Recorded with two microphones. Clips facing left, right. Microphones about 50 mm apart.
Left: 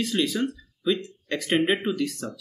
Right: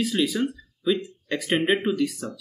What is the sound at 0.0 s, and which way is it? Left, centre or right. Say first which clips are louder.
Speech: right 1 dB; centre.